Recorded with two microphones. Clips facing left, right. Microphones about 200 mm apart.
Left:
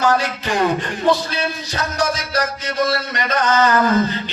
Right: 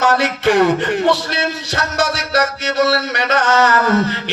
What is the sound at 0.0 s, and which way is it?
Speech, 70° right (ahead or behind).